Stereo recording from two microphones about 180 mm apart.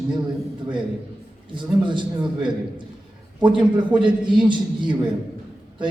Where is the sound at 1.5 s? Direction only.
25° right (ahead or behind).